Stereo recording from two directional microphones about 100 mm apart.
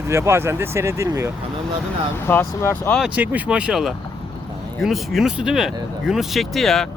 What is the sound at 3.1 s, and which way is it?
Speech, 15° right (ahead or behind).